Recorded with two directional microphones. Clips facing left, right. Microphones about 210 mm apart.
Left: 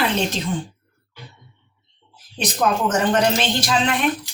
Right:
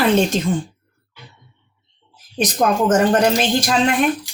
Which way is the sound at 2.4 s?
45° right (ahead or behind).